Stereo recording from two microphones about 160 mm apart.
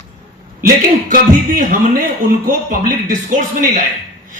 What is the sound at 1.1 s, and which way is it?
Speech, 60° right (ahead or behind).